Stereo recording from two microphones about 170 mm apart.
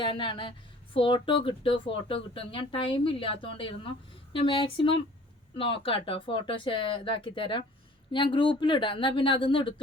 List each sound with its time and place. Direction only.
0.0 s speech: 30° left (ahead or behind)